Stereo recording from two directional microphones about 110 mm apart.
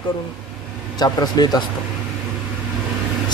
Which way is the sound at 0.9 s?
40° left (ahead or behind).